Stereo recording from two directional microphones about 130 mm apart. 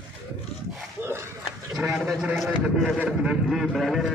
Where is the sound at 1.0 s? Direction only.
20° right (ahead or behind).